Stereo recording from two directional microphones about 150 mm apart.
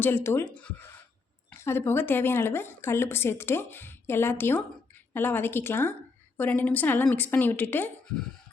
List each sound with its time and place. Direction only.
0.0 s speech: 15° left (ahead or behind)